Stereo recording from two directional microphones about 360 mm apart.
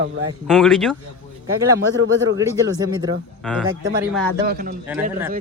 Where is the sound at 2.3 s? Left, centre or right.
Centre.